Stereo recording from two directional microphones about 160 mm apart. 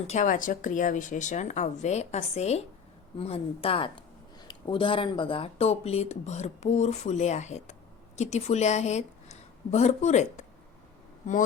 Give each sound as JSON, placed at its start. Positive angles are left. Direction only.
{"t": 0.1, "sound": "speech", "side_deg": 55}